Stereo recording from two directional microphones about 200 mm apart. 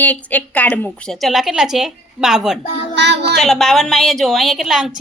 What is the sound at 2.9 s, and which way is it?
Child singing, 60° right (ahead or behind).